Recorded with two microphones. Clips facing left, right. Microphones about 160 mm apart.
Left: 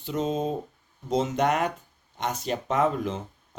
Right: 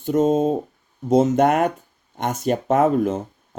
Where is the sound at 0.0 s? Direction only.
50° right (ahead or behind).